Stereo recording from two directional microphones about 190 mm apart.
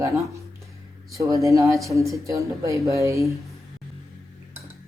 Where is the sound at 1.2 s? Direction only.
15° right (ahead or behind).